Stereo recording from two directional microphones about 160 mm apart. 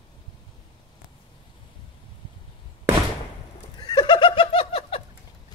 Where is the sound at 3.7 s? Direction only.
25° left (ahead or behind).